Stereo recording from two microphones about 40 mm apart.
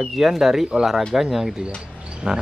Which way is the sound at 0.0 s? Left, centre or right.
Centre.